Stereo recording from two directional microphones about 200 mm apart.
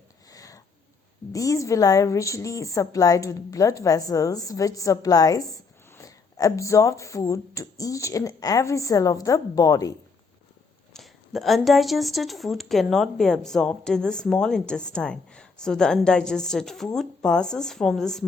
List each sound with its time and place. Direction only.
0.3 s a sound: 15° left (ahead or behind)
1.3 s a woman's voice: 15° left (ahead or behind)
10.9 s speech: centre (ahead or behind)